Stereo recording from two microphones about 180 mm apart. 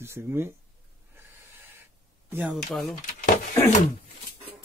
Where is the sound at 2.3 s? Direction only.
10° right (ahead or behind).